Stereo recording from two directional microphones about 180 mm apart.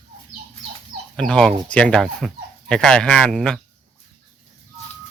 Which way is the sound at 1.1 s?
5° left (ahead or behind).